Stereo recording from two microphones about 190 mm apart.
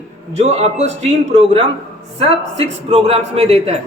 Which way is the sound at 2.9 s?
30° right (ahead or behind).